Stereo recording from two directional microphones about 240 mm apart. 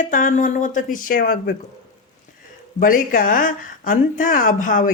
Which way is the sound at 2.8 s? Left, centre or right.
Left.